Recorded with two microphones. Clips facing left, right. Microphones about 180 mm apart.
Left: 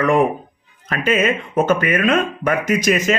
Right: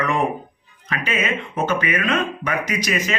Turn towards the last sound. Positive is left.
turn(degrees=45)  # may be behind; listen again after turning